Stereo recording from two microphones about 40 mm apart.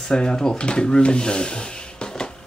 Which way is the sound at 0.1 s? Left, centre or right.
Centre.